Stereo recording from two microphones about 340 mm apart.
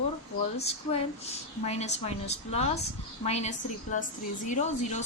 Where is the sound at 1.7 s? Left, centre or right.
Centre.